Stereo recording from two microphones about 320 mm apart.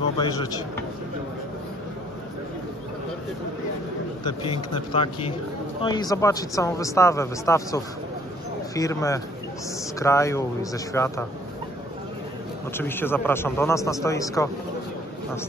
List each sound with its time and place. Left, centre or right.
0.2 s a man's voice: centre
4.2 s a man's voice: centre
12.7 s a man's voice: centre